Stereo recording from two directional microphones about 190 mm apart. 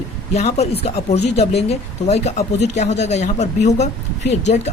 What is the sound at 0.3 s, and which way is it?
Speech, 35° left (ahead or behind).